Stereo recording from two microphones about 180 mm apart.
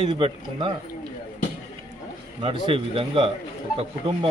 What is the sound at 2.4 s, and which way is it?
Speech, 30° right (ahead or behind).